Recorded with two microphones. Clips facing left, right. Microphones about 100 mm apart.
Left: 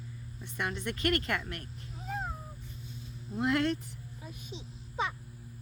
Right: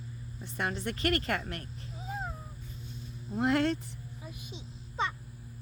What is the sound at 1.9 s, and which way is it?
Cat, 5° right (ahead or behind).